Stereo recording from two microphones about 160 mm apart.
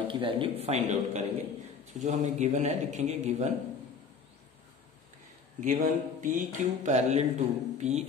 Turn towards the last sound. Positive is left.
turn(degrees=-45)  # may be behind; listen again after turning